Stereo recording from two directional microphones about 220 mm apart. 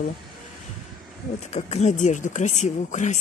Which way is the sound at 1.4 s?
30° left (ahead or behind).